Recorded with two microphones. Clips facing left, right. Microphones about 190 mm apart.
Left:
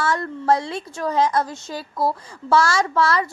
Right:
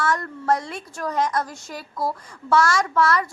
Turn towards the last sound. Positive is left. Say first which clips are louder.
# left 1 dB
turn(degrees=30)  # may be behind; listen again after turning